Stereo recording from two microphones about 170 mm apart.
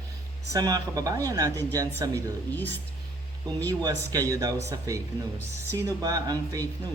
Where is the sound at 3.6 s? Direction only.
20° right (ahead or behind).